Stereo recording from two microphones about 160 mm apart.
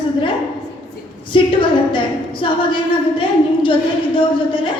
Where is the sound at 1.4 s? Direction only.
30° left (ahead or behind).